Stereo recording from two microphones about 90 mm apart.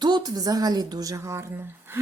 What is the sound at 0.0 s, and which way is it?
Speech, 55° right (ahead or behind).